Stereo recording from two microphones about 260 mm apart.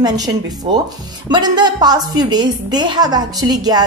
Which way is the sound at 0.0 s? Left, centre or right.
Centre.